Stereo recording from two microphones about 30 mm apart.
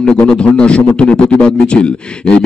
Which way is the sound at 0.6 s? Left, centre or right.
Left.